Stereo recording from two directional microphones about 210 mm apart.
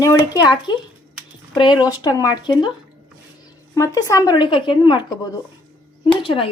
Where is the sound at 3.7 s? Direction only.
15° left (ahead or behind).